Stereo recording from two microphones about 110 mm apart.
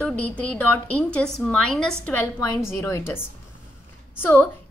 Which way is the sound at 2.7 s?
25° left (ahead or behind).